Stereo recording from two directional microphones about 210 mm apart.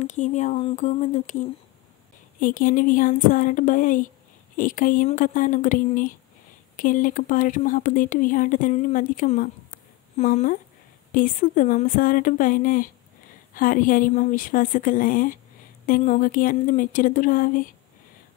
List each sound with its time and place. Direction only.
0.0 s speech: 35° left (ahead or behind)